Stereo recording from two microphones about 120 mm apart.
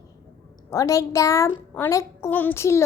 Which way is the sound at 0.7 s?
25° left (ahead or behind).